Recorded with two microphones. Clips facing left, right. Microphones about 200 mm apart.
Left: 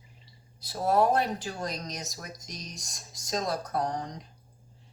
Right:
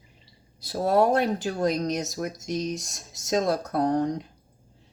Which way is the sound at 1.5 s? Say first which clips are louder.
Right 10 dB; 55° right (ahead or behind).